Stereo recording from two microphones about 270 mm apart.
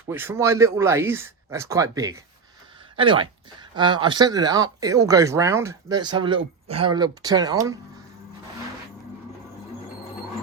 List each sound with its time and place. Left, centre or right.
0.1 s speech: centre